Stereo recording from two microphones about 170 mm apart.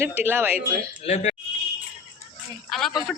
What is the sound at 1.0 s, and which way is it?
Speech, 40° left (ahead or behind).